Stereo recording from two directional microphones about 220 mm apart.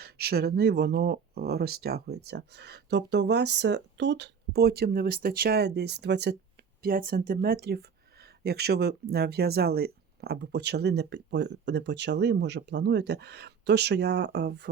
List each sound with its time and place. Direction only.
0.0 s speech: 45° right (ahead or behind)